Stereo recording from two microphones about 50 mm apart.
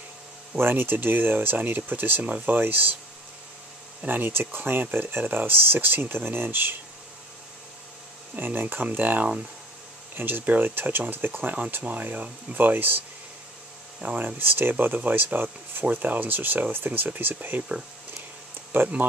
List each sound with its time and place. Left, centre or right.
0.6 s speech: right
4.1 s speech: right
8.4 s speech: right
11.8 s speech: right
14.0 s speech: right